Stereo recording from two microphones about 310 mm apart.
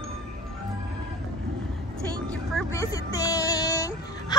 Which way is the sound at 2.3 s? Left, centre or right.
Centre.